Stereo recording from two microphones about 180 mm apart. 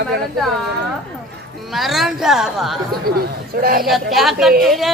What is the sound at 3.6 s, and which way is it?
Speech, 55° right (ahead or behind).